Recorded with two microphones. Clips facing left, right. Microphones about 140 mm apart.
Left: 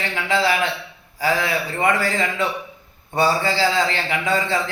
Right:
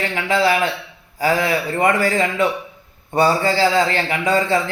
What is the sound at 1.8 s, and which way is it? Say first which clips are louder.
A man's voice: right 3 dB; 50° right (ahead or behind).